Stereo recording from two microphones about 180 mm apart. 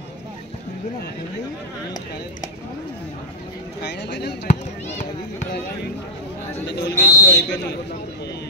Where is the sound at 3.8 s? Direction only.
70° left (ahead or behind).